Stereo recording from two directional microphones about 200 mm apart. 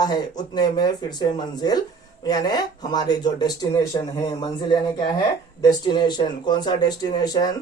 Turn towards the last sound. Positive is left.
turn(degrees=20)  # may be behind; listen again after turning